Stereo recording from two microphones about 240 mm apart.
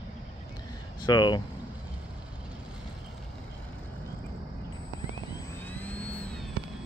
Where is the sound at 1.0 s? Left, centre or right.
Centre.